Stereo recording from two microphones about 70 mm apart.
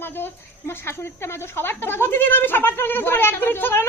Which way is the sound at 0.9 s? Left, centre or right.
Left.